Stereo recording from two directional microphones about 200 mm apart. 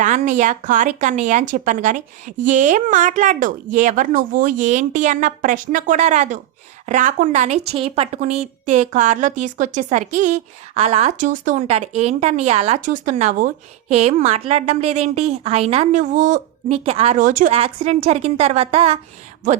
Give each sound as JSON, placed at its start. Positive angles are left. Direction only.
{"t": 0.0, "sound": "a woman's voice", "side_deg": -40}